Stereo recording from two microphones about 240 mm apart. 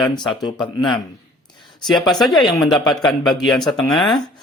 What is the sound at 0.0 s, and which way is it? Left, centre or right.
Speech, centre.